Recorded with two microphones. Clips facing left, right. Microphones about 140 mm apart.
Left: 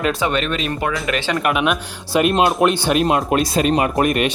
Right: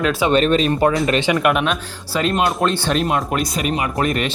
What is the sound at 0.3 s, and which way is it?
Speech, 35° right (ahead or behind).